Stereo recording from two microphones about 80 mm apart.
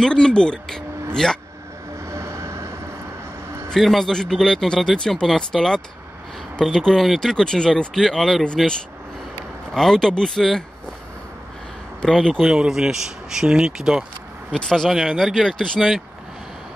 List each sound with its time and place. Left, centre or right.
0.0 s speech: centre
2.0 s train: right
3.7 s speech: centre
9.8 s speech: centre
12.0 s speech: centre
12.4 s speech: centre
14.5 s speech: centre